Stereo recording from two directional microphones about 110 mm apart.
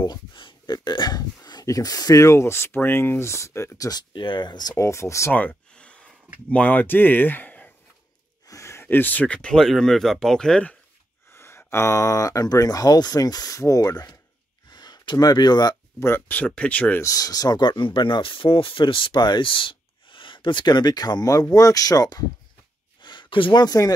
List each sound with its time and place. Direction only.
0.0 s speech: 40° left (ahead or behind)
4.1 s speech: 50° left (ahead or behind); by 5.3 s 25° left (ahead or behind)
5.3 s a sound: 15° left (ahead or behind)
6.5 s speech: 15° left (ahead or behind)
8.5 s speech: 25° left (ahead or behind); by 10.8 s 10° left (ahead or behind)
11.3 s speech: 25° left (ahead or behind); by 15.7 s 40° left (ahead or behind)
16.0 s speech: 20° left (ahead or behind)
17.0 s speech: 30° left (ahead or behind)
23.0 s speech: 45° left (ahead or behind)